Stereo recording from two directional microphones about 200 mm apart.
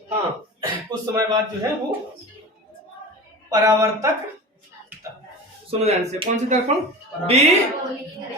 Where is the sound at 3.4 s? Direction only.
15° right (ahead or behind).